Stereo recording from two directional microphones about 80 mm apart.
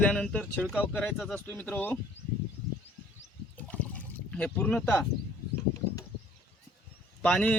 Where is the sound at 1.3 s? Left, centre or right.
Left.